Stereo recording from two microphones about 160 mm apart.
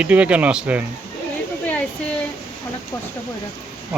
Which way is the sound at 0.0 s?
10° right (ahead or behind).